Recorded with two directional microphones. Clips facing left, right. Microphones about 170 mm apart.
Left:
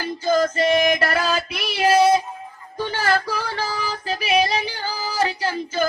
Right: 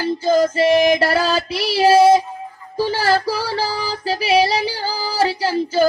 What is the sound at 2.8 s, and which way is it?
Child singing, 35° right (ahead or behind).